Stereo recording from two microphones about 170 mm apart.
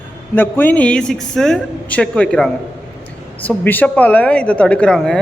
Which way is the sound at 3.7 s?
10° left (ahead or behind).